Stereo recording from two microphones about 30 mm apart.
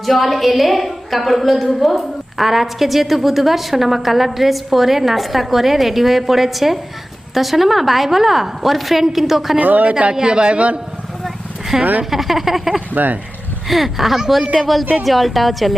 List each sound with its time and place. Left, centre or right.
0.0 s a woman's voice: centre
9.6 s speech: right
10.1 s speech: right
11.7 s speech: centre
12.1 s speech: centre
12.9 s speech: right
13.7 s a woman's voice: centre